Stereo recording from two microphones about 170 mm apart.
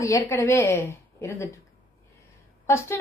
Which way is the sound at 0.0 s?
15° left (ahead or behind).